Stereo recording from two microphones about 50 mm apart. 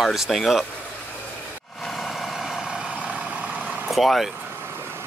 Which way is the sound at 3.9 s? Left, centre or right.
Centre.